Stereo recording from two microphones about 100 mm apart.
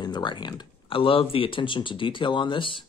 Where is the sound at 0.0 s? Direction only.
50° left (ahead or behind).